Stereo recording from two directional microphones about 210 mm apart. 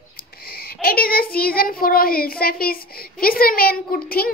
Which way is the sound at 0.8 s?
45° left (ahead or behind).